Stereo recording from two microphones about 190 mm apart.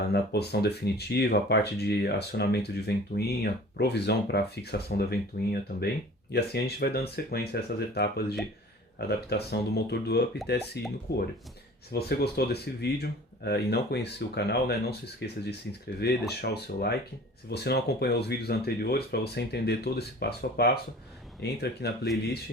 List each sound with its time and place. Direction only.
0.0 s speech: 55° left (ahead or behind)
11.9 s speech: 60° left (ahead or behind)